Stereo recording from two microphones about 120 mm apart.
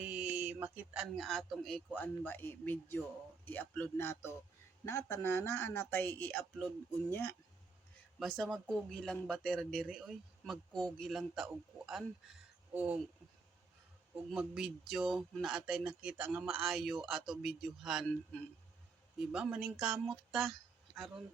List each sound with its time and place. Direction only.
0.0 s mantra: 10° right (ahead or behind)
1.1 s a man's voice: centre (ahead or behind); by 7.3 s 20° left (ahead or behind)
8.2 s speech: centre (ahead or behind)
14.3 s speech: 5° right (ahead or behind)
18.1 s a man's voice: 10° left (ahead or behind)
19.3 s speech: 5° right (ahead or behind)